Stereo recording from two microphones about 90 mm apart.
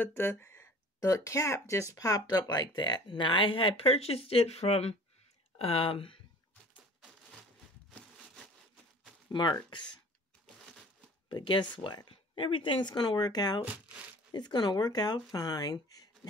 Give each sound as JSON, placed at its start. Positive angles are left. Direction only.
{"t": 0.0, "sound": "speech", "side_deg": 25}
{"t": 5.6, "sound": "speech", "side_deg": 90}
{"t": 9.3, "sound": "speech", "side_deg": 55}
{"t": 10.4, "sound": "crumpling", "side_deg": 5}
{"t": 11.2, "sound": "speech", "side_deg": 60}